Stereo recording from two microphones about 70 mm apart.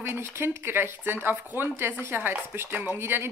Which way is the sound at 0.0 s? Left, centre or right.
Right.